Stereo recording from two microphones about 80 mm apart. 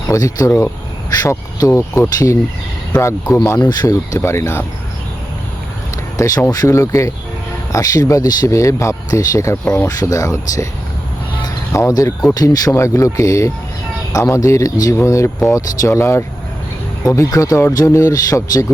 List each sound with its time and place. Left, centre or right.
0.1 s speech: left
3.6 s speech: left
3.8 s speech: left
6.1 s speech: left
8.4 s speech: left
11.7 s speech: left
12.3 s speech: left
12.7 s speech: left